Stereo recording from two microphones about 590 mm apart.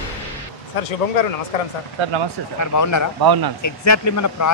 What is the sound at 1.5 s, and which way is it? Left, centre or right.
Speech, left.